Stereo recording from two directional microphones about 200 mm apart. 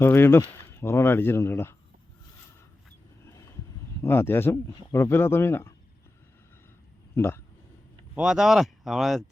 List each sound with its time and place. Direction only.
0.0 s speech: 10° left (ahead or behind)
4.0 s speech: 10° left (ahead or behind)
7.2 s speech: 10° left (ahead or behind)
8.1 s speech: 5° right (ahead or behind)